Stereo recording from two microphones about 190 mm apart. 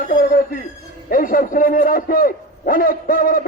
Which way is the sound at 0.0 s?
45° left (ahead or behind).